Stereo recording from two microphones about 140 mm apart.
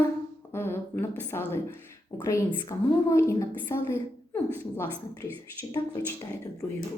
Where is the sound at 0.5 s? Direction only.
15° left (ahead or behind).